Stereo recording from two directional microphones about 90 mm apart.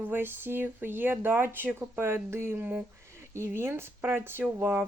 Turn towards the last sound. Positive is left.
turn(degrees=-25)  # may be behind; listen again after turning